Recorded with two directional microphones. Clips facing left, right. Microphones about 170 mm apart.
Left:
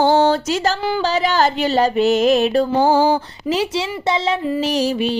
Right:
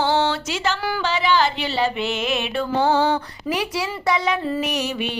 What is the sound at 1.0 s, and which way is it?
Music, 40° left (ahead or behind).